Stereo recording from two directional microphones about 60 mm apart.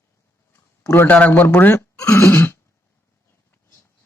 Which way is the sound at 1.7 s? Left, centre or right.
Left.